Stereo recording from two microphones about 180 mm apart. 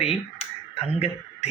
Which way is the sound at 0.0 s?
35° left (ahead or behind).